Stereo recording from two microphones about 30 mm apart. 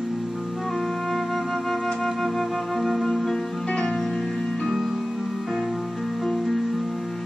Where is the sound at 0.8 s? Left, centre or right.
Centre.